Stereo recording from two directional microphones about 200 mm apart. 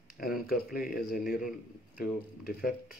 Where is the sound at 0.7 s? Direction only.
45° left (ahead or behind).